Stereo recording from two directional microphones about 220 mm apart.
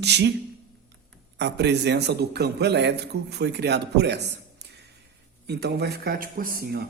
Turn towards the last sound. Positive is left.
turn(degrees=-45)  # may be behind; listen again after turning